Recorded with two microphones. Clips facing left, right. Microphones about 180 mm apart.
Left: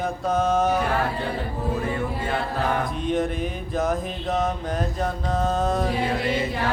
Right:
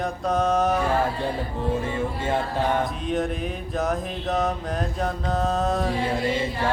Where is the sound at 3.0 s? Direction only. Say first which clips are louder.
Left 1 dB; centre (ahead or behind).